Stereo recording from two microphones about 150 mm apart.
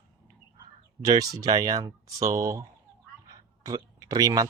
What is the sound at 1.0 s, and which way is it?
Speech, 25° right (ahead or behind).